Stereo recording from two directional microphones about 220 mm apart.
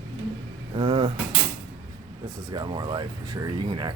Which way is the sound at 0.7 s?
20° right (ahead or behind).